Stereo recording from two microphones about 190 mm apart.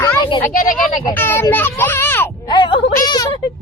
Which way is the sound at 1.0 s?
10° left (ahead or behind).